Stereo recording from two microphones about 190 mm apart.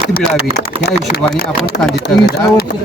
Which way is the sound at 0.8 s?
55° left (ahead or behind).